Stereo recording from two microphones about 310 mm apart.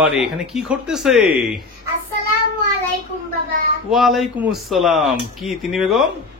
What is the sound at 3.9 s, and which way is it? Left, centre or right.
Speech, centre.